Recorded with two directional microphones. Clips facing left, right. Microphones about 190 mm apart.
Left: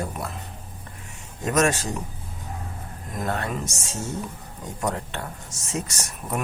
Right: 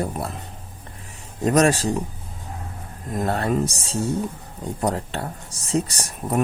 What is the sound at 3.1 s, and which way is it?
Speech, 35° right (ahead or behind).